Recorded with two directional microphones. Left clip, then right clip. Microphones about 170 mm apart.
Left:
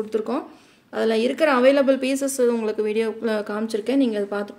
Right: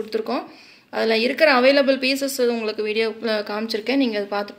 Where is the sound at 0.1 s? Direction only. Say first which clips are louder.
Even; 55° left (ahead or behind).